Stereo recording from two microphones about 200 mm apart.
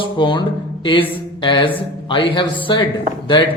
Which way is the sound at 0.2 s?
25° left (ahead or behind).